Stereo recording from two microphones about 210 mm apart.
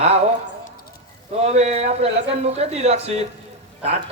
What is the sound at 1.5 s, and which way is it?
Speech, 30° right (ahead or behind).